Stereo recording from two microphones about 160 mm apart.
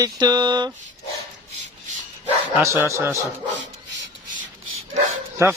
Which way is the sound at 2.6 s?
15° right (ahead or behind).